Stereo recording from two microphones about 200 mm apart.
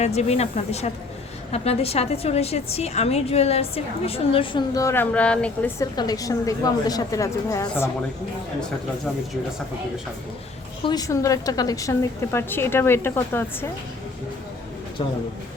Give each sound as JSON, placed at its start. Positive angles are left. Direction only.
{"t": 0.0, "sound": "a woman's voice", "side_deg": 30}
{"t": 5.8, "sound": "a woman's voice", "side_deg": 20}
{"t": 10.8, "sound": "a woman's voice", "side_deg": 20}